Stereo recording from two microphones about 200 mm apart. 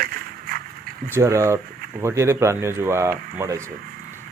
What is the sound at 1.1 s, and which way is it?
Speech, 15° right (ahead or behind).